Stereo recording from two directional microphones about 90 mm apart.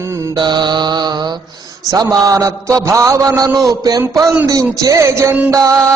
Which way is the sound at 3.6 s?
45° right (ahead or behind).